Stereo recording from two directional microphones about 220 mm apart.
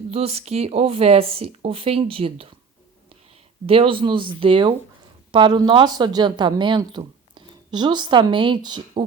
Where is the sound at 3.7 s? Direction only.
25° right (ahead or behind).